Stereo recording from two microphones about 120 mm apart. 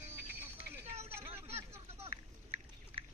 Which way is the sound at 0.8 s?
60° right (ahead or behind).